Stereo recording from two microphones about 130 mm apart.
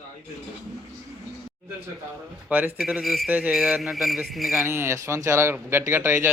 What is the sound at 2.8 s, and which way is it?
Speech, centre (ahead or behind).